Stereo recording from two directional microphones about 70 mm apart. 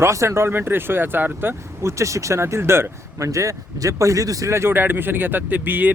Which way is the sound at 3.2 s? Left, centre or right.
Right.